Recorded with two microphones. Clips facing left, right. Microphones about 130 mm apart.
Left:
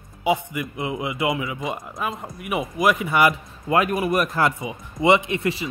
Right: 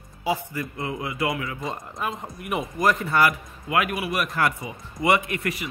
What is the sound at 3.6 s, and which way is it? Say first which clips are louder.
Speech: left 4 dB; 35° left (ahead or behind).